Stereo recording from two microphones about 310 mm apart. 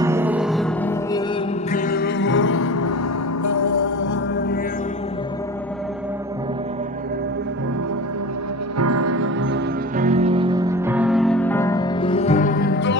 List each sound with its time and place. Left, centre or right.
0.0 s music: centre
1.7 s music: left
3.4 s music: left
4.0 s music: left
8.7 s music: right
9.9 s music: right; by 12.9 s left